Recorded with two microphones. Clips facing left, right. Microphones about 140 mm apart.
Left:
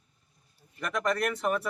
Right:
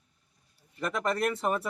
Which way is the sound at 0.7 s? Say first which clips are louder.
Even; 25° right (ahead or behind).